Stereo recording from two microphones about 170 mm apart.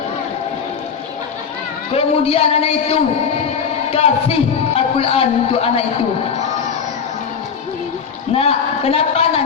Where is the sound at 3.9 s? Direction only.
35° left (ahead or behind).